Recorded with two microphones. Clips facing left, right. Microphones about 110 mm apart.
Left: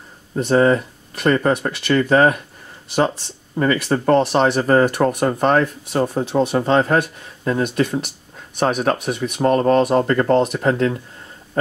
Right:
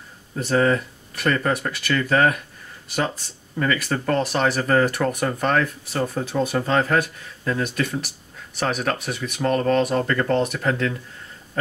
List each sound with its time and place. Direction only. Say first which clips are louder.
0.4 s speech: left 5 dB; 30° left (ahead or behind)
3.5 s speech: left 5 dB; 30° left (ahead or behind)
9.1 s speech: left 5 dB; 30° left (ahead or behind)